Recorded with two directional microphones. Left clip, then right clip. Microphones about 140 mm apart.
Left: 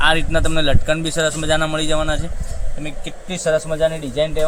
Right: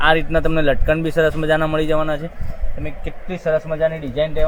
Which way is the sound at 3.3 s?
20° right (ahead or behind).